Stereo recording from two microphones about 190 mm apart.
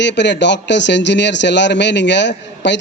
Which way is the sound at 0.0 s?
65° left (ahead or behind).